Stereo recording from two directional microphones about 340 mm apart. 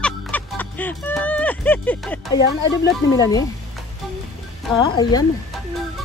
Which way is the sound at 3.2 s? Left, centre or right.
Centre.